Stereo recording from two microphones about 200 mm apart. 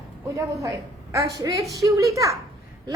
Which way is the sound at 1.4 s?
20° right (ahead or behind).